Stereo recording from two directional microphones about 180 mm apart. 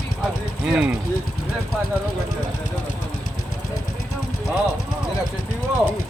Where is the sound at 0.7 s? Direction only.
5° right (ahead or behind).